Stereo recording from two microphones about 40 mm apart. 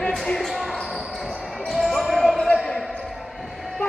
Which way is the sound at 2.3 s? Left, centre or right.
Centre.